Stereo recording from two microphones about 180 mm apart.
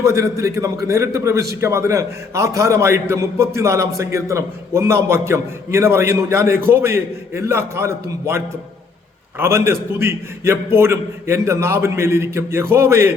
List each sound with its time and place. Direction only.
0.0 s a man's voice: 15° right (ahead or behind)
9.4 s a man's voice: 15° right (ahead or behind)